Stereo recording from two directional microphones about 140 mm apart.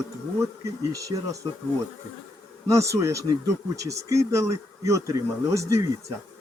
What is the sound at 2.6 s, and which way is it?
Speech, 20° right (ahead or behind).